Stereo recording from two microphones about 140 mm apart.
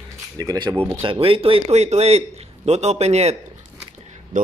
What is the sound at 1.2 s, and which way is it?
A man's voice, 40° right (ahead or behind).